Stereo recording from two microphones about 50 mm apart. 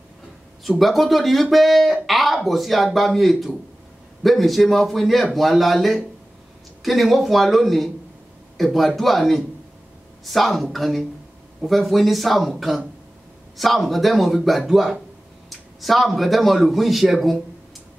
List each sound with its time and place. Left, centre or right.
0.7 s speech: centre